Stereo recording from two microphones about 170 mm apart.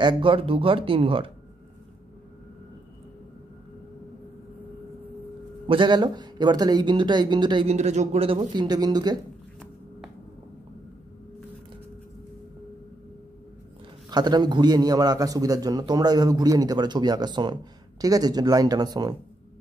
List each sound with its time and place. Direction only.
0.0 s speech: 30° right (ahead or behind)
5.7 s a man's voice: 25° right (ahead or behind)
7.7 s speech: 40° right (ahead or behind); by 9.2 s 25° right (ahead or behind)
14.1 s a man's voice: 25° right (ahead or behind)